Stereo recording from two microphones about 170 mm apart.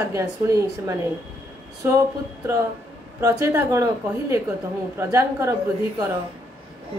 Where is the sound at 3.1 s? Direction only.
20° right (ahead or behind).